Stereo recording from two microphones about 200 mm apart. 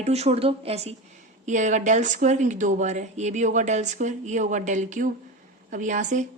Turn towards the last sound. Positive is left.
turn(degrees=-40)  # may be behind; listen again after turning